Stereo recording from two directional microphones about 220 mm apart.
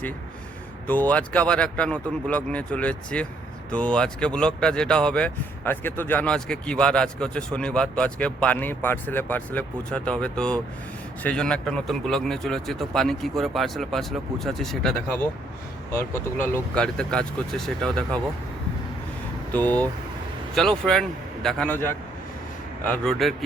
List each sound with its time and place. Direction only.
0.9 s speech: 5° left (ahead or behind)
19.5 s a man's voice: 5° left (ahead or behind)